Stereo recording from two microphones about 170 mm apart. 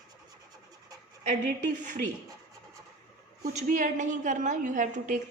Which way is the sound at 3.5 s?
50° right (ahead or behind).